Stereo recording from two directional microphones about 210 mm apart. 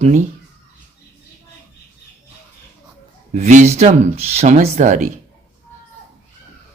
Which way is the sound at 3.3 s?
35° right (ahead or behind).